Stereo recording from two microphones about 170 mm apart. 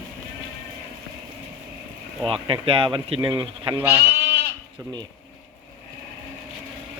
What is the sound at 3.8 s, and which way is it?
Speech, 10° right (ahead or behind).